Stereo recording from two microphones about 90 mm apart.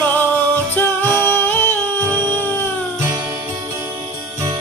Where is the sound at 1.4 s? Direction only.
20° left (ahead or behind).